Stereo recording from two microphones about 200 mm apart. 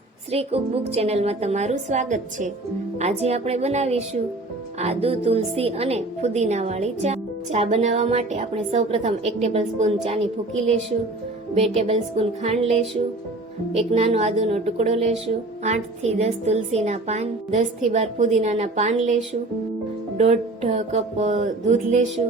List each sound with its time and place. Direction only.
0.3 s a woman's voice: 30° right (ahead or behind)
11.5 s a woman's voice: 30° right (ahead or behind)